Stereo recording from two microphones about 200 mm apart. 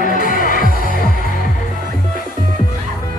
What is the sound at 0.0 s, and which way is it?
Music, 45° left (ahead or behind).